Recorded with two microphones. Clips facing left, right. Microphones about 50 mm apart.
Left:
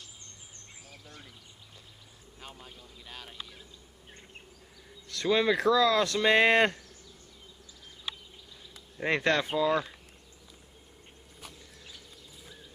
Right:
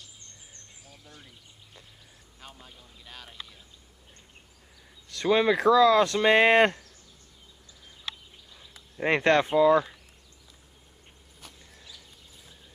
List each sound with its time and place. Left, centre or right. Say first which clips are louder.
2.4 s speech: left 1 dB; centre
5.1 s speech: right 3 dB; right
9.0 s speech: right 5 dB; right